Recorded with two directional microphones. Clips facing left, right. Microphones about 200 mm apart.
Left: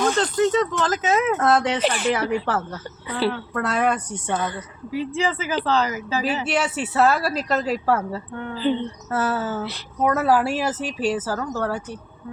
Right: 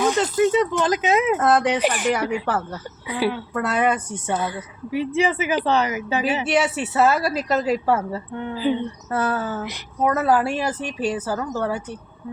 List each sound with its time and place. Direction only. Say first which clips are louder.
0.0 s speech: right 1 dB; 10° right (ahead or behind)
1.3 s a woman's voice: right 1 dB; centre (ahead or behind)
1.8 s speech: right 1 dB; 15° right (ahead or behind)
3.6 s a woman's voice: right 1 dB; centre (ahead or behind)
4.9 s speech: right 3 dB; 20° right (ahead or behind)
6.5 s a woman's voice: right 3 dB; 5° right (ahead or behind)
9.1 s a woman's voice: even; 5° left (ahead or behind)